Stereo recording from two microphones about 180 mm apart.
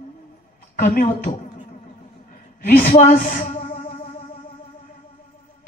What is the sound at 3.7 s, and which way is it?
Music, 50° left (ahead or behind).